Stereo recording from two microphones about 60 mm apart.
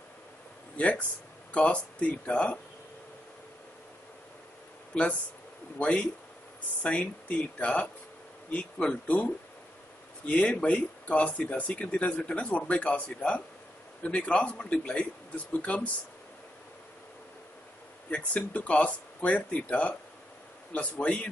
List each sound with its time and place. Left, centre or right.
0.7 s speech: left
5.8 s speech: centre
18.1 s speech: left